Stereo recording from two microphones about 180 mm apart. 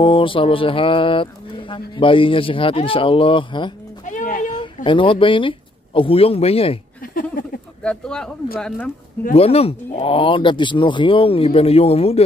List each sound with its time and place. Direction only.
0.0 s speech: 30° left (ahead or behind)
4.0 s a sound: 45° left (ahead or behind)
4.5 s speech: 25° left (ahead or behind)
7.0 s a sound: 50° left (ahead or behind)
7.8 s speech: 5° left (ahead or behind)
9.3 s speech: 35° left (ahead or behind)